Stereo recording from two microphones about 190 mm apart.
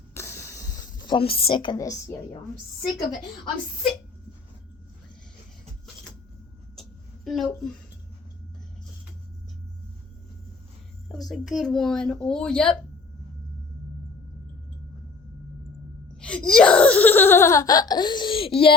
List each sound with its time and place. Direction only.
0.1 s a sound: 15° left (ahead or behind)
7.3 s a child's voice: centre (ahead or behind)
11.1 s a child's voice: centre (ahead or behind)
16.2 s laughter: 5° left (ahead or behind); by 18.7 s 30° left (ahead or behind)